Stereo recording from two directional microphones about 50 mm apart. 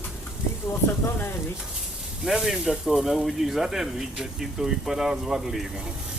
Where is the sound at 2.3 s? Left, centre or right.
Centre.